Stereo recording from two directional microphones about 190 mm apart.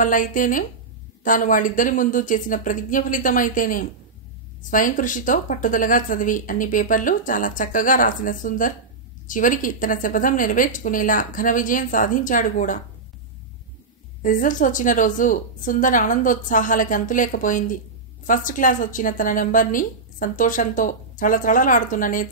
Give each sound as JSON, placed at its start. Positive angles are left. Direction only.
{"t": 0.0, "sound": "a woman's voice", "side_deg": 45}
{"t": 14.2, "sound": "a woman's voice", "side_deg": 45}